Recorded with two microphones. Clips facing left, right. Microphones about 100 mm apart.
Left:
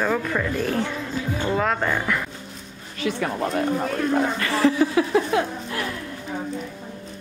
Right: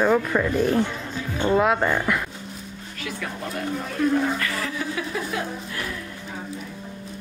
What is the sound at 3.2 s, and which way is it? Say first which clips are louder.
Speech: left 6 dB; 35° left (ahead or behind).